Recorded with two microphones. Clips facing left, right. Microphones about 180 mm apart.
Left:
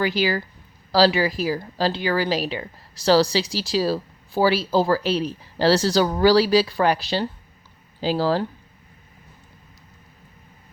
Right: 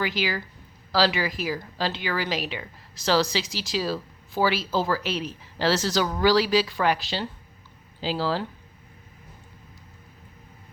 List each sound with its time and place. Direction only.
0.0 s speech: 35° left (ahead or behind)